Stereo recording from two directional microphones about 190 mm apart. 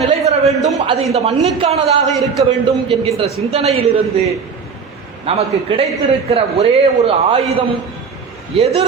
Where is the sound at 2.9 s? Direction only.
30° right (ahead or behind).